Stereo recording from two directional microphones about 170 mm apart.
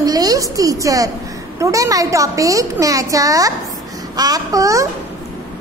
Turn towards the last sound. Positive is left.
turn(degrees=-20)  # may be behind; listen again after turning